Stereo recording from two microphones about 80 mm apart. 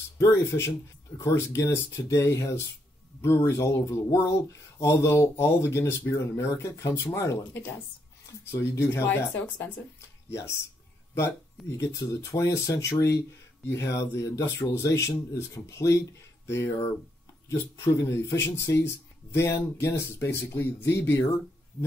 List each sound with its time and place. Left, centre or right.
0.2 s speech: left
11.6 s speech: centre
11.9 s speech: left